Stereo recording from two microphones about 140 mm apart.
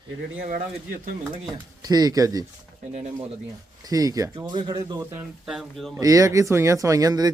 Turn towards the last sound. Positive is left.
turn(degrees=-25)  # may be behind; listen again after turning